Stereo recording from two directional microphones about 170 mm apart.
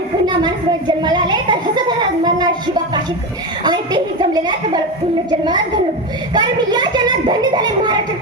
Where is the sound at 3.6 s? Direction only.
25° right (ahead or behind).